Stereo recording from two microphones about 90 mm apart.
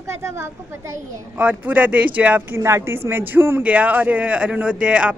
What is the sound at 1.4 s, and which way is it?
Speech, 20° right (ahead or behind).